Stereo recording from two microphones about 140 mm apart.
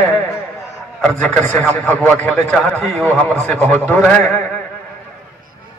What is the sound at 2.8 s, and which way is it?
A man's voice, centre (ahead or behind).